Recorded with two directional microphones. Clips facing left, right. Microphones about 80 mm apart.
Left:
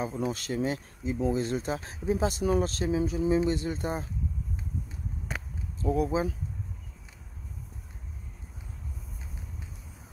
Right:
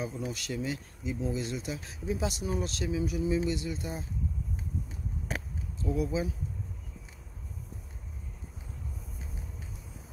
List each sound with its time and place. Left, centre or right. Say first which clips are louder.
0.0 s speech: left 5 dB; left
2.4 s speech: left 7 dB; left
2.7 s speech: left 4 dB; left
5.8 s speech: left 4 dB; left